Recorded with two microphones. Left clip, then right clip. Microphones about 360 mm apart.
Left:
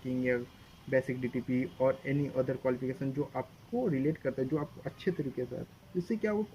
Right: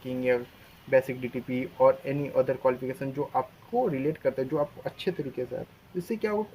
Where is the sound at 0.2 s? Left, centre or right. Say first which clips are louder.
Right 7 dB; right.